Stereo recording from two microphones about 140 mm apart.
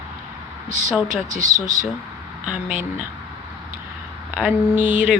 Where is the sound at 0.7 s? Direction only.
70° right (ahead or behind).